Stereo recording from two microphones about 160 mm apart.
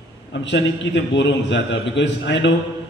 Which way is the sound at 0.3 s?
90° left.